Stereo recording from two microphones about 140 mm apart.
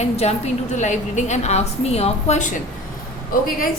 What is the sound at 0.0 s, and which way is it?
A woman's voice, 50° left (ahead or behind).